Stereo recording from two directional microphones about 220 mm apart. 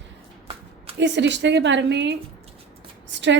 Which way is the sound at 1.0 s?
55° right (ahead or behind).